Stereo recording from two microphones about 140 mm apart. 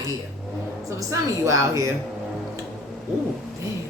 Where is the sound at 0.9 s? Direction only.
20° right (ahead or behind).